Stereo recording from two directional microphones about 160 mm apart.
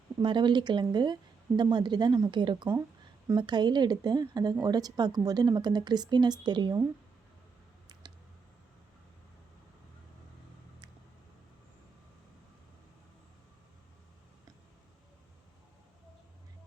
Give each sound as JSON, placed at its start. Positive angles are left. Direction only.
{"t": 0.2, "sound": "a woman's voice", "side_deg": -30}